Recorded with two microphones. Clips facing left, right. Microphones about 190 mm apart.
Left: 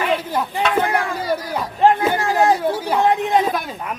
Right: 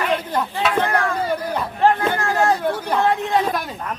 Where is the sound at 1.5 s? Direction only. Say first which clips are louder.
Left 3 dB; 15° left (ahead or behind).